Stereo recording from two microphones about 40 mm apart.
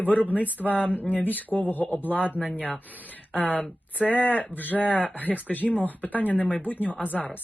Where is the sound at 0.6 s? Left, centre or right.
Centre.